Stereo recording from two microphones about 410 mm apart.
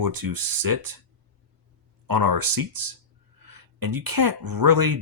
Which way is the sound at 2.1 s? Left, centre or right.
Right.